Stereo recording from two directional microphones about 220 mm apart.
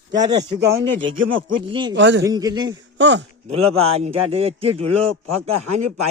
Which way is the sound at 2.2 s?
15° right (ahead or behind).